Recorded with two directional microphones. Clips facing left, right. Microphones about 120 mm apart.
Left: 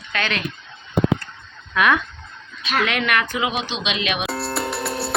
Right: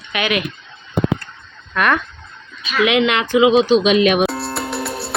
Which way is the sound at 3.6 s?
40° right (ahead or behind).